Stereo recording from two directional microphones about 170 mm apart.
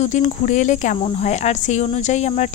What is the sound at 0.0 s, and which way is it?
Speech, 45° left (ahead or behind).